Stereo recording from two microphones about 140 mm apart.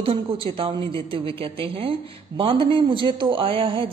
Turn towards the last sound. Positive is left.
turn(degrees=-40)  # may be behind; listen again after turning